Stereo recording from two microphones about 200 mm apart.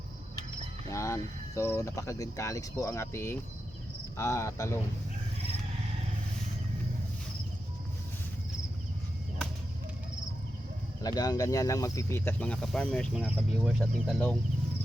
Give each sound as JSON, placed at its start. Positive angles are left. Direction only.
{"t": 0.9, "sound": "speech", "side_deg": 15}
{"t": 11.0, "sound": "speech", "side_deg": 20}